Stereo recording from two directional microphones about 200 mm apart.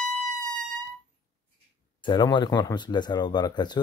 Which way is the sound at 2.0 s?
25° left (ahead or behind).